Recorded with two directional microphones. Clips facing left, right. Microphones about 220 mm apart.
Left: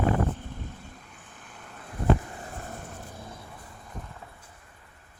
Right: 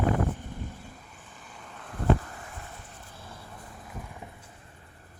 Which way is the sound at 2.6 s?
45° left (ahead or behind).